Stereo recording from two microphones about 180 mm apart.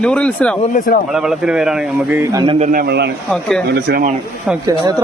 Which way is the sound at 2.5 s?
40° right (ahead or behind).